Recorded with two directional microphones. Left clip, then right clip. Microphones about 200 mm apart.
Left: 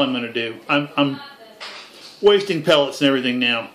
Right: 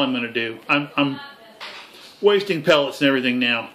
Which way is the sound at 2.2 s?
10° right (ahead or behind).